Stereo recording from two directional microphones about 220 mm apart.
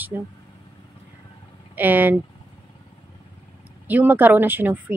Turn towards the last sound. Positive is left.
turn(degrees=-10)  # may be behind; listen again after turning